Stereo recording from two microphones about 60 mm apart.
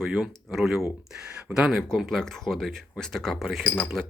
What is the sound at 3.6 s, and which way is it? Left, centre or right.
Speech, left.